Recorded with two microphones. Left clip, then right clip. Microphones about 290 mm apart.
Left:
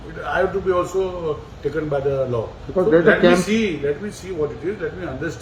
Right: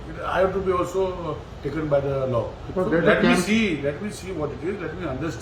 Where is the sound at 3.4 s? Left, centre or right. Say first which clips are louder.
Left 2 dB; centre.